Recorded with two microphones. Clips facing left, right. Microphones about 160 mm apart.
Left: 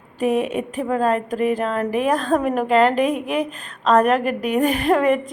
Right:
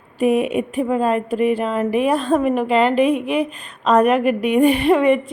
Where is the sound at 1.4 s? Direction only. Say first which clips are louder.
Right 2 dB; 45° left (ahead or behind).